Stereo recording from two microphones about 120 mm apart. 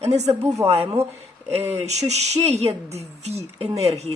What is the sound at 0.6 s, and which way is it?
Speech, 55° right (ahead or behind).